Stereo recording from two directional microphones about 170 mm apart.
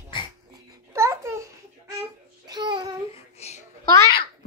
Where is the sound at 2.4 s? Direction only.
25° right (ahead or behind).